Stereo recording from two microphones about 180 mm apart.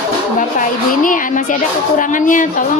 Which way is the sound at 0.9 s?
50° left (ahead or behind).